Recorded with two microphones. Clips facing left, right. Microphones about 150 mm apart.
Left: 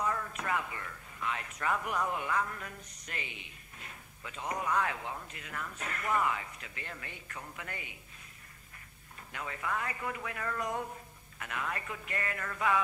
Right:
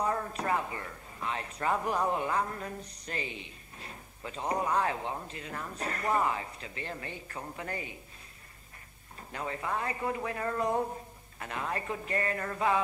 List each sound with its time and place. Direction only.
0.0 s a man's voice: 35° right (ahead or behind)
9.3 s a man's voice: 30° right (ahead or behind)